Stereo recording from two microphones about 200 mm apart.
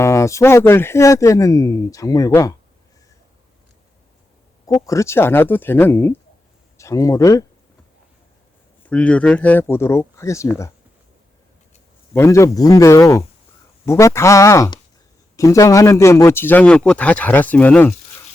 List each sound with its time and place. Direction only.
0.0 s speech: 15° left (ahead or behind)
4.9 s speech: 15° left (ahead or behind)
8.9 s speech: 5° left (ahead or behind)
12.1 s speech: 15° left (ahead or behind)